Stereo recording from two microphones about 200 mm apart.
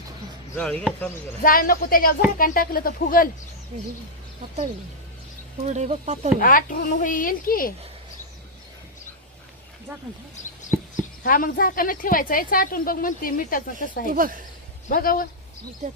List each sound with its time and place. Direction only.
0.5 s speech: 5° left (ahead or behind)
1.4 s speech: 45° left (ahead or behind)
5.6 s speech: 35° right (ahead or behind)
6.4 s speech: 45° left (ahead or behind)
10.9 s speech: 45° left (ahead or behind)
14.1 s speech: 45° right (ahead or behind)
14.8 s speech: 45° left (ahead or behind)